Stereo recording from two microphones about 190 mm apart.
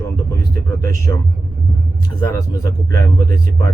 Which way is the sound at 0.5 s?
15° left (ahead or behind).